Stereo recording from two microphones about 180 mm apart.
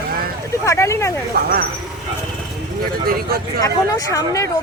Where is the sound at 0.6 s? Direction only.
15° left (ahead or behind).